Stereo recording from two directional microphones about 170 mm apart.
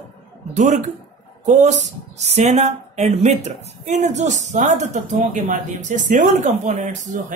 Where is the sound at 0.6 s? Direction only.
45° right (ahead or behind).